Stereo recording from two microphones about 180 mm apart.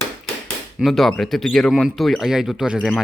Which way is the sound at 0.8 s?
Centre (ahead or behind).